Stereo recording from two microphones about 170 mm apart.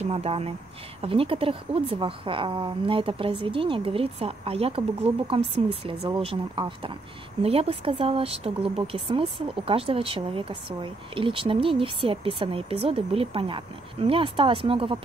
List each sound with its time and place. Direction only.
0.1 s speech: 35° right (ahead or behind)